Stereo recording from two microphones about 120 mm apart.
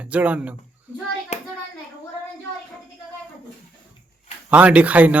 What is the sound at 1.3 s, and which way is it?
Hands, 75° left (ahead or behind).